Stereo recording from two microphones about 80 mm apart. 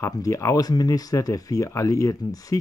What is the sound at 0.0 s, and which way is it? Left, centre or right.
Speech, left.